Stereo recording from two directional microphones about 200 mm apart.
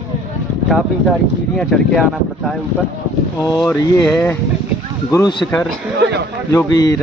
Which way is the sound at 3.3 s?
20° left (ahead or behind).